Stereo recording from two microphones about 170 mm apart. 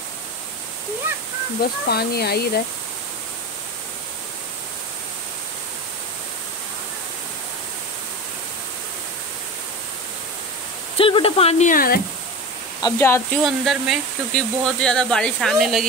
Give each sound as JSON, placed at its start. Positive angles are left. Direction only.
{"t": 1.9, "sound": "speech", "side_deg": 70}
{"t": 11.0, "sound": "speech", "side_deg": 30}
{"t": 12.8, "sound": "speech", "side_deg": 15}
{"t": 13.4, "sound": "speech", "side_deg": 0}